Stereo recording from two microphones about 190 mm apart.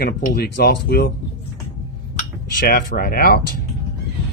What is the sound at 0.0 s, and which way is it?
Speech, 55° left (ahead or behind).